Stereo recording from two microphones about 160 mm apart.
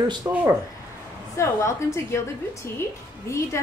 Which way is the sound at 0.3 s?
20° right (ahead or behind).